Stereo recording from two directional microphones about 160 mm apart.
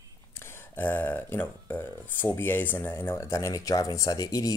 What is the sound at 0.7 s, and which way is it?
Speech, 10° left (ahead or behind).